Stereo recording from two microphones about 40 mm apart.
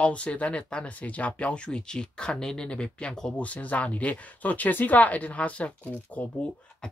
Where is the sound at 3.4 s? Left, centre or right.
Left.